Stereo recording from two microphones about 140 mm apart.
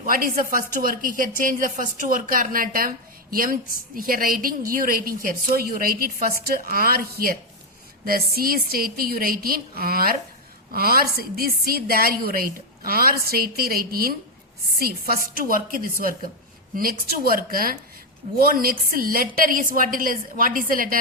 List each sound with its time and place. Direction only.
0.0 s speech: 90° right